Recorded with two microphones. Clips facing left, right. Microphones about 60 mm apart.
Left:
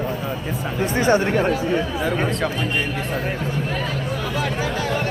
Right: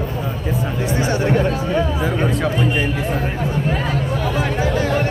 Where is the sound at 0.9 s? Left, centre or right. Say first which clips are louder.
Left 1 dB; left.